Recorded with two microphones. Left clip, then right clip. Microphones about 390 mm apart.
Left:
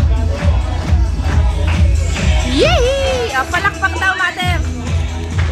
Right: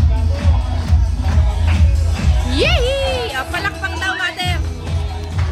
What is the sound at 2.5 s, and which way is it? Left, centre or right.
Music, centre.